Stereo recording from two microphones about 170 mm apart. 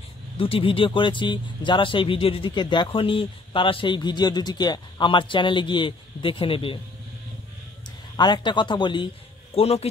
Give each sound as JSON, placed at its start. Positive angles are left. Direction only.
{"t": 0.4, "sound": "speech", "side_deg": 30}
{"t": 8.2, "sound": "a man's voice", "side_deg": 25}